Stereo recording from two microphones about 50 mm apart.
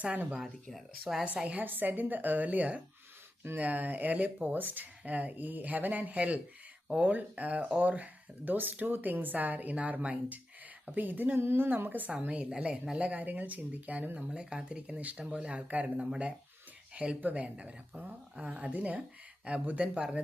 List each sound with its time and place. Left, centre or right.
0.0 s speech: right
0.3 s speech: centre
1.5 s speech: right
12.1 s speech: right
13.0 s speech: right
17.2 s speech: right